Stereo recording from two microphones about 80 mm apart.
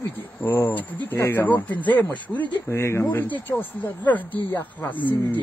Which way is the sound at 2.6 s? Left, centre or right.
Left.